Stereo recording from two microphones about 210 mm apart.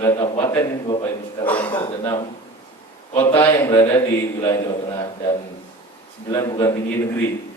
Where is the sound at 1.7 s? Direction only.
20° left (ahead or behind).